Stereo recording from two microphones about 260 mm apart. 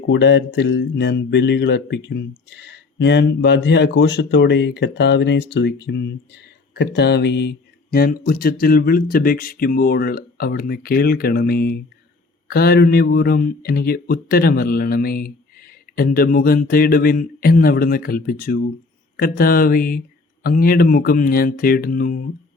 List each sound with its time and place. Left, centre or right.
0.1 s speech: left